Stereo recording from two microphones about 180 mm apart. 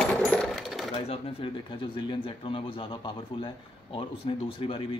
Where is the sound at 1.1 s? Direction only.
30° left (ahead or behind).